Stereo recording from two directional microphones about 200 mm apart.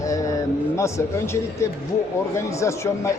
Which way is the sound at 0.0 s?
15° left (ahead or behind).